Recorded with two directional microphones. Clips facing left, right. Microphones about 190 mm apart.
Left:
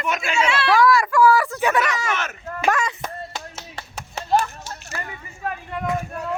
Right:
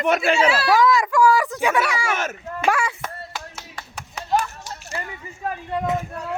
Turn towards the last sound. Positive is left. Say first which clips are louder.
# right 2 dB
turn(degrees=-25)  # may be behind; listen again after turning